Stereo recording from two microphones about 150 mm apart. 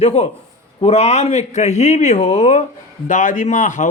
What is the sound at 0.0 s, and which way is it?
A man's voice, 45° left (ahead or behind).